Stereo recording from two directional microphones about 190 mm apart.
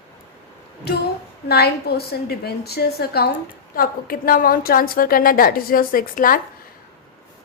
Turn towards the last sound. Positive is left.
turn(degrees=45)  # may be behind; listen again after turning